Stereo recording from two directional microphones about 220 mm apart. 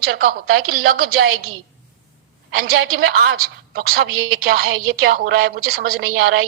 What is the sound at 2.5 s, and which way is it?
A woman's voice, 45° right (ahead or behind).